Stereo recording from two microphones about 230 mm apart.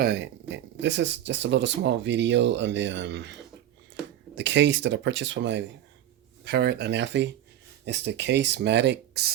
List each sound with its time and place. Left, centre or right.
0.0 s speech: right
4.4 s speech: right